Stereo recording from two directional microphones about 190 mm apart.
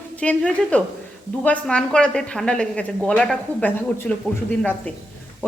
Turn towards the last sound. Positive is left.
turn(degrees=5)  # may be behind; listen again after turning